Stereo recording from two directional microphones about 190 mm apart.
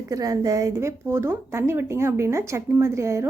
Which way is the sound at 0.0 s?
15° right (ahead or behind).